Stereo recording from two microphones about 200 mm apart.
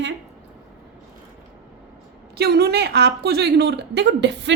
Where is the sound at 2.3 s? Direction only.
55° right (ahead or behind).